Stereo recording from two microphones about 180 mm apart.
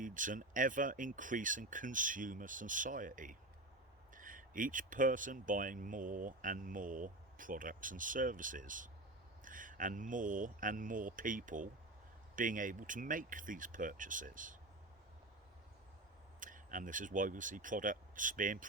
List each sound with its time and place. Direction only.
0.0 s speech: 45° right (ahead or behind)
16.4 s speech: 45° right (ahead or behind)